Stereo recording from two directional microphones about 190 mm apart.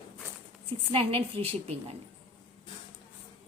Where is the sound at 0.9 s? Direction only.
30° right (ahead or behind).